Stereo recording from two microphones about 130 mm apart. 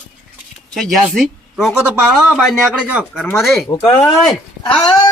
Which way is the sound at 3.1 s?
15° left (ahead or behind).